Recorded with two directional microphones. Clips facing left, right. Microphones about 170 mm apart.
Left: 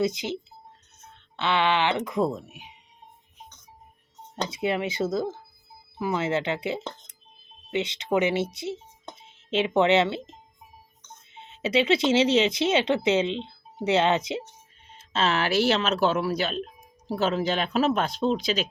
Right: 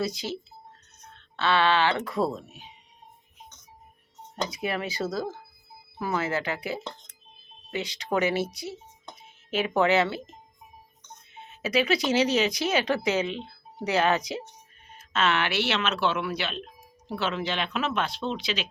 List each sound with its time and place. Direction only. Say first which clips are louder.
0.0 s speech: left 4 dB; 20° left (ahead or behind)
4.4 s speech: left 3 dB; 25° left (ahead or behind); by 18.7 s 45° left (ahead or behind)